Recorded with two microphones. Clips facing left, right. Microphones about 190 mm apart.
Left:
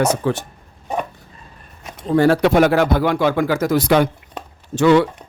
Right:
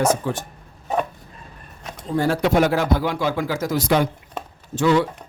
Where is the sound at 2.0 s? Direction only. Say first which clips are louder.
Left 6 dB; 70° left (ahead or behind).